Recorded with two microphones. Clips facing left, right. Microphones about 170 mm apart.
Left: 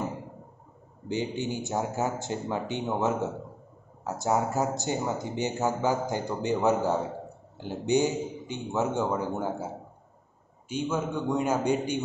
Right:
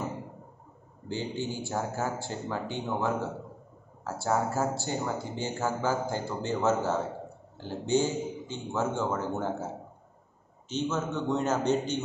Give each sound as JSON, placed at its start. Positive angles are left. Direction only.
{"t": 1.0, "sound": "speech", "side_deg": 20}
{"t": 10.7, "sound": "speech", "side_deg": 10}